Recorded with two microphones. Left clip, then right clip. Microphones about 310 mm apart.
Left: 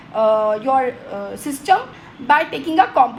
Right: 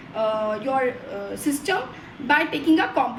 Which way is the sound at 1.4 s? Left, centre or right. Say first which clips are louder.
Left 8 dB; centre.